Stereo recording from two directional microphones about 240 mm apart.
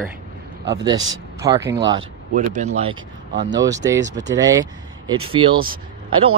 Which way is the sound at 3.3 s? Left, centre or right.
Right.